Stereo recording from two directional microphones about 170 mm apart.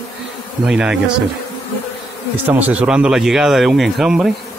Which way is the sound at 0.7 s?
5° right (ahead or behind).